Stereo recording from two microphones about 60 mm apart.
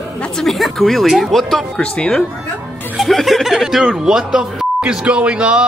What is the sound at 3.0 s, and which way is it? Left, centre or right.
A man's voice, centre.